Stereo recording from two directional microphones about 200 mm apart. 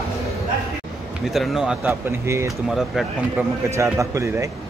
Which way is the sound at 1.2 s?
Centre (ahead or behind).